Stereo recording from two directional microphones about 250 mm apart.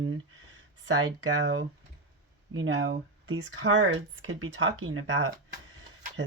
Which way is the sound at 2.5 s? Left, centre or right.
Right.